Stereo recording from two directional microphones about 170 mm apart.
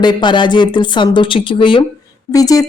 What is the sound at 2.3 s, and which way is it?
Speech, 20° left (ahead or behind).